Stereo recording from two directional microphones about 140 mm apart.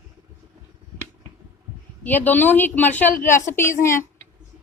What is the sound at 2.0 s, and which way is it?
A woman's voice, 10° left (ahead or behind).